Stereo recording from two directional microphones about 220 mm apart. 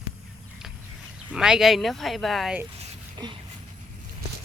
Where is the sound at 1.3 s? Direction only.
5° right (ahead or behind).